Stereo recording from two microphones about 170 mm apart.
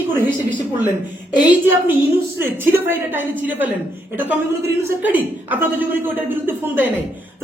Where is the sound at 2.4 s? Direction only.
15° right (ahead or behind).